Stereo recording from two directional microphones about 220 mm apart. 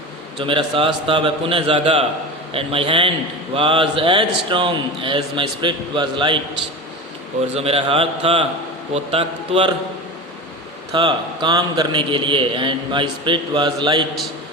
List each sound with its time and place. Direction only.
0.3 s a man's voice: 25° right (ahead or behind)
7.5 s a man's voice: 25° right (ahead or behind)
10.9 s a man's voice: 20° right (ahead or behind)